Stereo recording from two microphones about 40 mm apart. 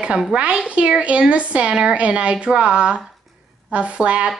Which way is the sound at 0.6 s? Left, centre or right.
Right.